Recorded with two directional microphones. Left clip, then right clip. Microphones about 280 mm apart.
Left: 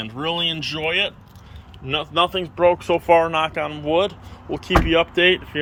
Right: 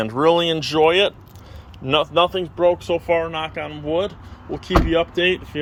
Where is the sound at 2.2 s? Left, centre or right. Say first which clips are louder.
Right 1 dB; centre.